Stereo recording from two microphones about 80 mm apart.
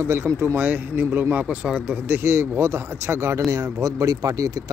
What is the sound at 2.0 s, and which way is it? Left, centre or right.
Speech, right.